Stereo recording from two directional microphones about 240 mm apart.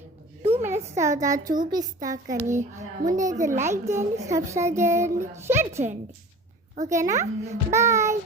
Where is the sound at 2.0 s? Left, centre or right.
Right.